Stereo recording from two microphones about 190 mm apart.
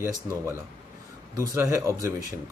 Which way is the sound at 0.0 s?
15° right (ahead or behind).